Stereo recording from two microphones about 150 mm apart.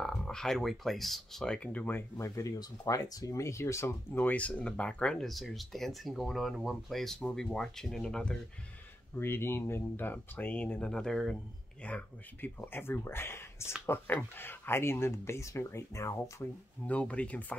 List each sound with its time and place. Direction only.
0.0 s speech: 5° left (ahead or behind)
9.2 s speech: 15° left (ahead or behind)